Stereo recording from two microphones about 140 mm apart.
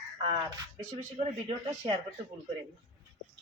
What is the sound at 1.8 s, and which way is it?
Speech, 40° right (ahead or behind).